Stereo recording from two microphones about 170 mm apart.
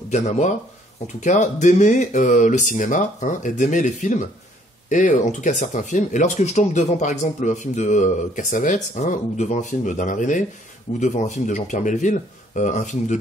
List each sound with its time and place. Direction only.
1.0 s speech: 45° left (ahead or behind)